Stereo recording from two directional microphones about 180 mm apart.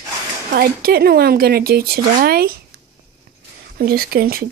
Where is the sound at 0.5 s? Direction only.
55° right (ahead or behind).